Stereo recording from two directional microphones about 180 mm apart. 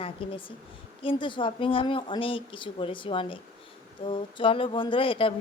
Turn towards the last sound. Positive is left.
turn(degrees=30)  # may be behind; listen again after turning